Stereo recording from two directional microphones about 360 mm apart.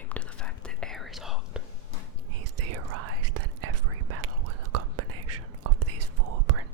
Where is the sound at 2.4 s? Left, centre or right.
Right.